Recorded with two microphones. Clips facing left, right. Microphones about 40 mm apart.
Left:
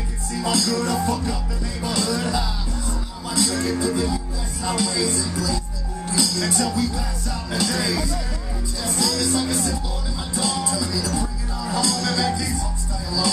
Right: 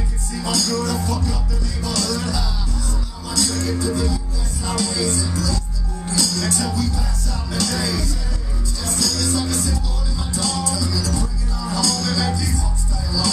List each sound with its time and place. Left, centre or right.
0.4 s music: centre
3.5 s music: centre
6.1 s speech: centre
7.5 s music: centre